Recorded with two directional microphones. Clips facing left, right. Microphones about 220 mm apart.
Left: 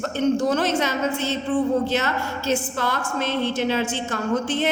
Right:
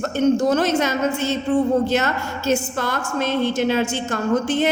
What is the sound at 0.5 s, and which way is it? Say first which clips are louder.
A woman's voice: right 3 dB; 45° right (ahead or behind).